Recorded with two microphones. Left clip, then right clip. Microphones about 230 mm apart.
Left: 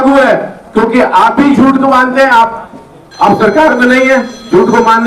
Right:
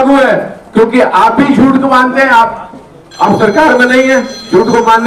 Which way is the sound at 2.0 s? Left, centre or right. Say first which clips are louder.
Right 1 dB; left.